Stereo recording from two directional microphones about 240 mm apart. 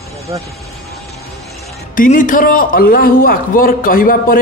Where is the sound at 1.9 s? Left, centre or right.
Left.